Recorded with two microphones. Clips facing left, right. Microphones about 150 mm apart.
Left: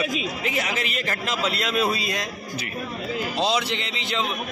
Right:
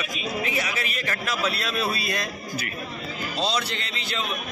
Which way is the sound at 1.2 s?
20° left (ahead or behind).